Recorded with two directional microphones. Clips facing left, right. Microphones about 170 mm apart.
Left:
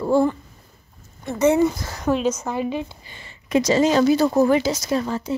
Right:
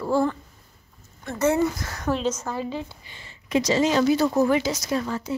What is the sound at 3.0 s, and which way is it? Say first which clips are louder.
Speech: left 3 dB; 55° left (ahead or behind).